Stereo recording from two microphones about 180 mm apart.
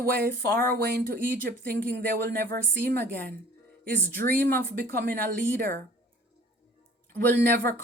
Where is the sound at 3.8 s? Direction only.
10° left (ahead or behind).